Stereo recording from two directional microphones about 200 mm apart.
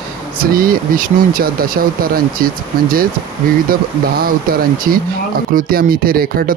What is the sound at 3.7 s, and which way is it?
Speech, 45° right (ahead or behind).